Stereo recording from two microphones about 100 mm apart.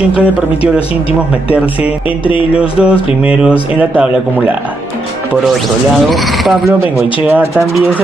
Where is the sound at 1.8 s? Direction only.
65° left (ahead or behind).